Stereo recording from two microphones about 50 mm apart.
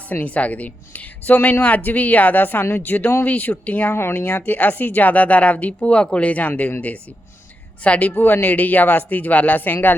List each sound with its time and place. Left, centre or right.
0.1 s speech: left
3.9 s speech: left
7.9 s speech: left